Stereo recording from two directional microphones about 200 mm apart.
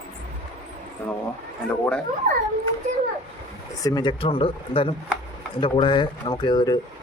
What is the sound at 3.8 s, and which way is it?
A man's voice, 20° left (ahead or behind).